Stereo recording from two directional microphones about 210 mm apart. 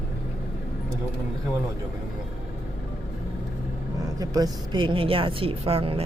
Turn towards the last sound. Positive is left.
turn(degrees=-25)  # may be behind; listen again after turning